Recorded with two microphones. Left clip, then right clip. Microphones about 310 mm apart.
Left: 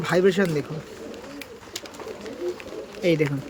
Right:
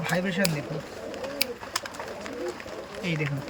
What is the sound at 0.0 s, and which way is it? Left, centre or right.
Speech, centre.